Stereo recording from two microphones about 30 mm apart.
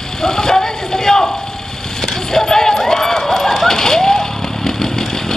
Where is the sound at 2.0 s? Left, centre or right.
Centre.